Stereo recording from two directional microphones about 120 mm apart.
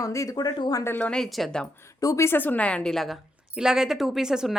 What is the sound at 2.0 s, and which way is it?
A woman's voice, 25° left (ahead or behind).